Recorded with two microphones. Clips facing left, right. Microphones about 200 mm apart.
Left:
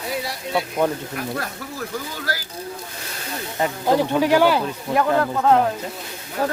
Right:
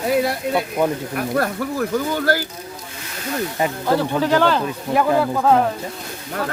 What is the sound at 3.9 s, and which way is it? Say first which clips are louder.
Speech: left 1 dB; 15° left (ahead or behind).